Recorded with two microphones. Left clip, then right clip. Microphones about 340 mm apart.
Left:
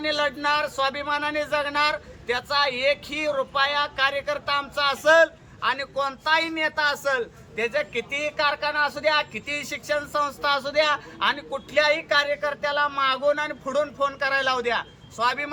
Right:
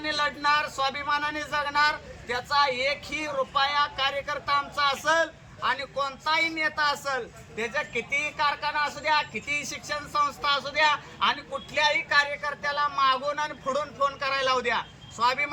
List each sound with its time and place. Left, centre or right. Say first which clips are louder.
0.0 s speech: left 2 dB; centre